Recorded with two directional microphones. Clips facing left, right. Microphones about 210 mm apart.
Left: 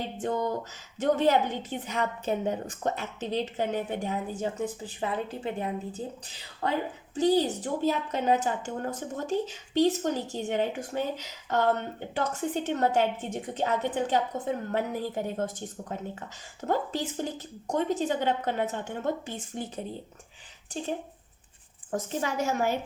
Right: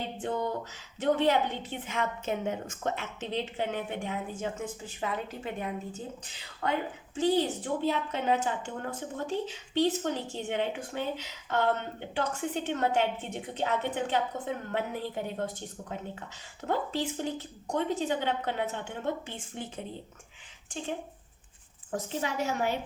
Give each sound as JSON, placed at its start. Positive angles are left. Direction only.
{"t": 0.2, "sound": "a woman's voice", "side_deg": 40}
{"t": 16.6, "sound": "a woman's voice", "side_deg": 45}
{"t": 21.9, "sound": "a woman's voice", "side_deg": 45}